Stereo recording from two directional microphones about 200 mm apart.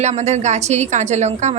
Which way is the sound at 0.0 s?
35° right (ahead or behind).